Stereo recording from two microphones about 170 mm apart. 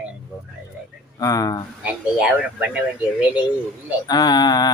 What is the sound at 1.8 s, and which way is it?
Speech, 10° right (ahead or behind).